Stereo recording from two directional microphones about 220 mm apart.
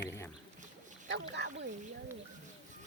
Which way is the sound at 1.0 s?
55° right (ahead or behind).